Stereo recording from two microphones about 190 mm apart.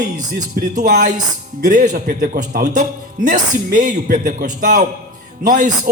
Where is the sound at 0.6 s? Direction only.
55° right (ahead or behind).